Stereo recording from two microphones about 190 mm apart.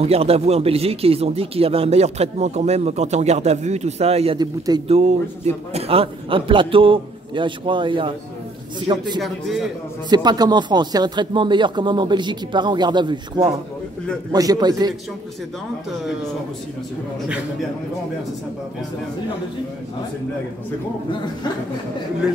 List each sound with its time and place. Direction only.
0.0 s speech: 30° right (ahead or behind)
4.4 s a man's voice: 20° right (ahead or behind)
4.9 s a man's voice: 35° right (ahead or behind)
9.2 s a man's voice: centre (ahead or behind)
10.0 s a man's voice: 20° right (ahead or behind)